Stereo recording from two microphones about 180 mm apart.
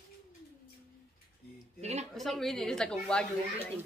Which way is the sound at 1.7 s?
35° right (ahead or behind).